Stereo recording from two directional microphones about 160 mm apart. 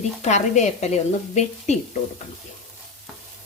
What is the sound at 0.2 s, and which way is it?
Speech, 45° left (ahead or behind).